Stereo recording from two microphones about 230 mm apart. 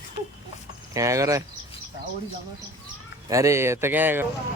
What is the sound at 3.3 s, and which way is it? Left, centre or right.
Speech, centre.